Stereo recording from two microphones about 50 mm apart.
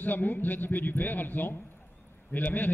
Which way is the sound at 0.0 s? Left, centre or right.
Left.